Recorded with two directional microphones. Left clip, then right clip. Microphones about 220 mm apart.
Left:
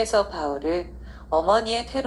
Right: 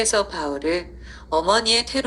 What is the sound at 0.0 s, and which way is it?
A woman's voice, 45° right (ahead or behind).